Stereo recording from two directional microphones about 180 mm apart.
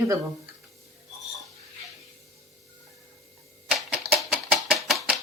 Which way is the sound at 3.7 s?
5° right (ahead or behind).